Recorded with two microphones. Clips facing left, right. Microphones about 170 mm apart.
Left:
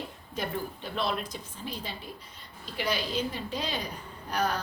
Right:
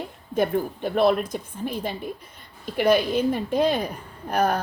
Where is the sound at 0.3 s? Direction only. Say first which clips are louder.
Right 11 dB; 55° right (ahead or behind).